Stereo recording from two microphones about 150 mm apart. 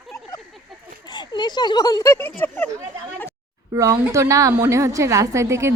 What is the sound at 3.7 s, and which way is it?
A woman's voice, 20° right (ahead or behind).